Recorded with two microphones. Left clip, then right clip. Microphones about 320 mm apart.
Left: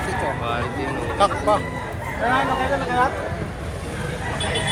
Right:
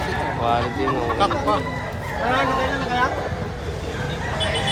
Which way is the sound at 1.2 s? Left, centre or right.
Centre.